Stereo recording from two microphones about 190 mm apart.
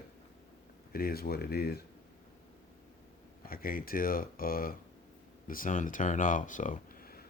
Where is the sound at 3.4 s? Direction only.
50° left (ahead or behind).